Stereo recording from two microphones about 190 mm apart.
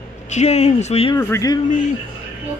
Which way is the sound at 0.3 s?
35° left (ahead or behind).